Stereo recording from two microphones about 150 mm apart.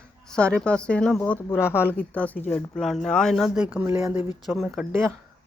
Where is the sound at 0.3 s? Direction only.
5° left (ahead or behind); by 4.3 s 15° right (ahead or behind).